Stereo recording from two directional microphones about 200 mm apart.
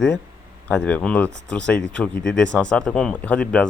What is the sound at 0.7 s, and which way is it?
Speech, 5° left (ahead or behind).